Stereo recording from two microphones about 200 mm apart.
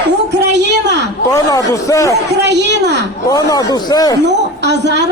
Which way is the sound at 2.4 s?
60° right (ahead or behind).